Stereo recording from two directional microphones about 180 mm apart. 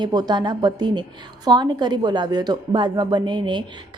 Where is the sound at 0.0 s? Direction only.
25° right (ahead or behind).